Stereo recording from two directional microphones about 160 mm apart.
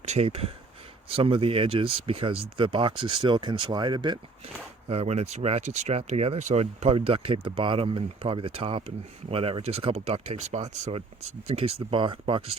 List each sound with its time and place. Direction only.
0.0 s speech: 45° right (ahead or behind)
4.9 s speech: 40° right (ahead or behind)